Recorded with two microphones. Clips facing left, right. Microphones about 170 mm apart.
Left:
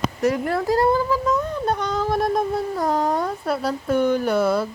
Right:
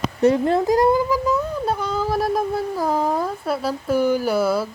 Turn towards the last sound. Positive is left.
turn(degrees=-5)  # may be behind; listen again after turning